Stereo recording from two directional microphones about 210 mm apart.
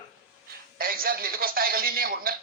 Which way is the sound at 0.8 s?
45° right (ahead or behind).